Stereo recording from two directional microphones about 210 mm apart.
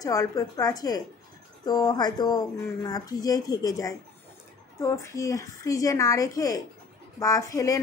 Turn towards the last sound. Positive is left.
turn(degrees=15)  # may be behind; listen again after turning